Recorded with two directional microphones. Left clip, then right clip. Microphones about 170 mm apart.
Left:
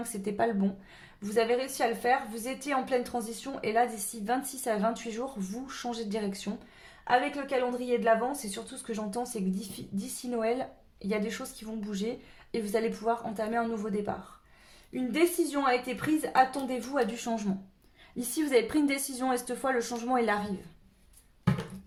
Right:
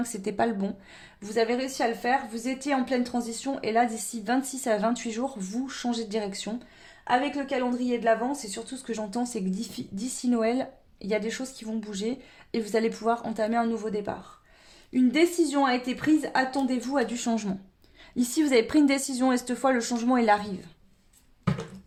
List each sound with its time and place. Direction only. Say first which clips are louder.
0.0 s a woman's voice: right 3 dB; 45° right (ahead or behind)